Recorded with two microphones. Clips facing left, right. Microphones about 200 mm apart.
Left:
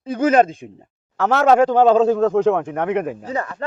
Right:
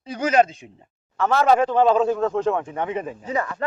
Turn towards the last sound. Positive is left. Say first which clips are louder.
# even
turn(degrees=30)  # may be behind; listen again after turning